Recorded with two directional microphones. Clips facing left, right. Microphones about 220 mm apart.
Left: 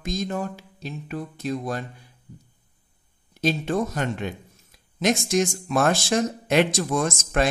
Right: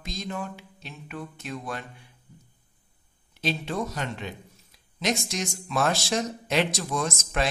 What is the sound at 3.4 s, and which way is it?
Speech, 45° left (ahead or behind).